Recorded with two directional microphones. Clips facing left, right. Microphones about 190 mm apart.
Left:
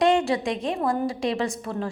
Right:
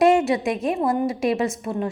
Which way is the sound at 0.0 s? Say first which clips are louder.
Right 3 dB; 25° right (ahead or behind).